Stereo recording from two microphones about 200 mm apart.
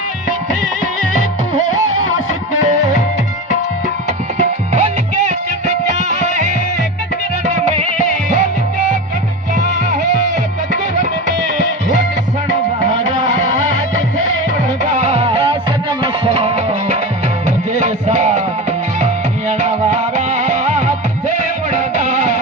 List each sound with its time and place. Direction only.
4.4 s music: 35° right (ahead or behind)
14.9 s music: 30° right (ahead or behind)
17.7 s music: 35° right (ahead or behind)
19.5 s music: 35° right (ahead or behind)